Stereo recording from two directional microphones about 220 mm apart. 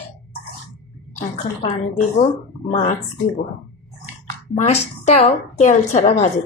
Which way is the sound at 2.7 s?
30° left (ahead or behind).